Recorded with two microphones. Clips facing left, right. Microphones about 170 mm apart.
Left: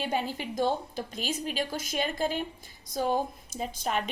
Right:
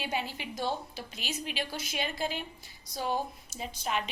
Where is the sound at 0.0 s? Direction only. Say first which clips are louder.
Left 4 dB; 45° left (ahead or behind).